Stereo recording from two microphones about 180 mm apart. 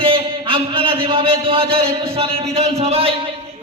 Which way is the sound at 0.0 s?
30° right (ahead or behind).